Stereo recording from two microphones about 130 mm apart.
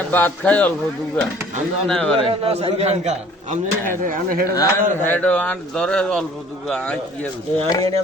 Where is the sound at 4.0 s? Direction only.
90° right.